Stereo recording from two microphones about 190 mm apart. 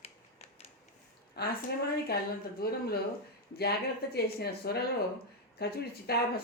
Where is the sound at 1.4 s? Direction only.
55° left (ahead or behind).